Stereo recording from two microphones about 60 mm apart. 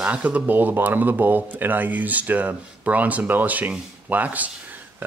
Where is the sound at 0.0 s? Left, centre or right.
Right.